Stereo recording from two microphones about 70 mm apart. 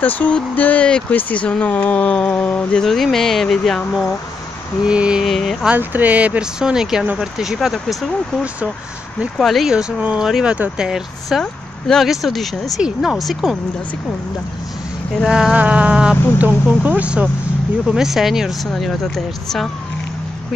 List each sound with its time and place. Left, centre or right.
0.0 s speech: left; by 3.8 s centre
4.8 s speech: centre
5.2 s speech: centre
5.8 s speech: right; by 8.0 s centre
9.4 s speech: centre
9.7 s speech: centre
15.2 s speech: centre
17.8 s speech: centre
18.9 s speech: centre